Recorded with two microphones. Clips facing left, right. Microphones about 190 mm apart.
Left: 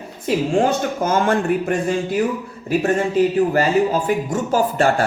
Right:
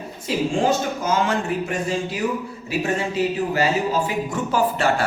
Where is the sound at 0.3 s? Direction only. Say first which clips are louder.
Left 3 dB; 50° left (ahead or behind).